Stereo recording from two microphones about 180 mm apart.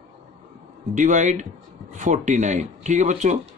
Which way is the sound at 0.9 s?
45° right (ahead or behind).